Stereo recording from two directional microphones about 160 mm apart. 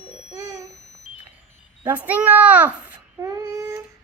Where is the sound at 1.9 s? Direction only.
10° right (ahead or behind).